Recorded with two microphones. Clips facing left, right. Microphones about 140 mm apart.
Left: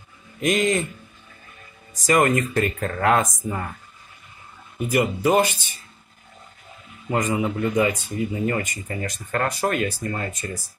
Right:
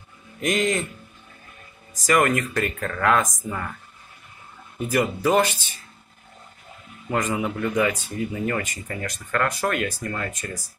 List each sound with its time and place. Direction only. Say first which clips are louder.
0.4 s speech: left 2 dB; 20° left (ahead or behind)
2.0 s speech: left 1 dB; 25° left (ahead or behind)
4.7 s speech: left 1 dB; 15° left (ahead or behind)
7.1 s a man's voice: left 2 dB; 15° left (ahead or behind)
8.4 s speech: left 2 dB; 30° left (ahead or behind)